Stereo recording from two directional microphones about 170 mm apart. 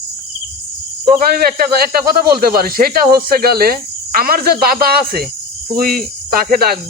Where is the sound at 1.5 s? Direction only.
60° right (ahead or behind).